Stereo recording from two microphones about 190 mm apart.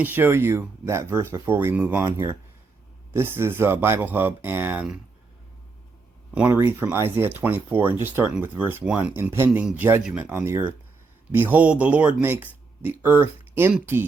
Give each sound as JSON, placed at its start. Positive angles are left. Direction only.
{"t": 0.0, "sound": "speech", "side_deg": -10}
{"t": 6.3, "sound": "speech", "side_deg": -10}
{"t": 13.2, "sound": "a sound", "side_deg": 30}
{"t": 13.6, "sound": "speech", "side_deg": -10}